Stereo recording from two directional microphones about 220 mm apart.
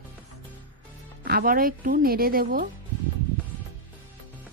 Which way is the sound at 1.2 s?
45° right (ahead or behind).